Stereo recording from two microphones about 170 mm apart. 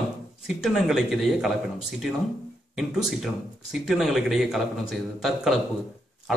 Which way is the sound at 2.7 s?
Centre (ahead or behind).